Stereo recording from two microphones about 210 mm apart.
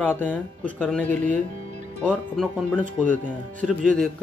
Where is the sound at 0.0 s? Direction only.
10° left (ahead or behind).